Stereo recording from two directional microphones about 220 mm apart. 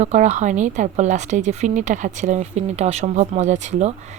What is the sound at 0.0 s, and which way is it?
Speech, 30° right (ahead or behind).